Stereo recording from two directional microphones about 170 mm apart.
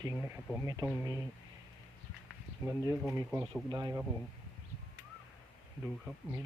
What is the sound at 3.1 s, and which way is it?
Speech, 15° right (ahead or behind).